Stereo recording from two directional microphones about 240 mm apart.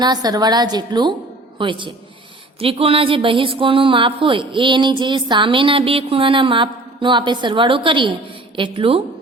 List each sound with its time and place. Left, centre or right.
0.0 s a woman's voice: centre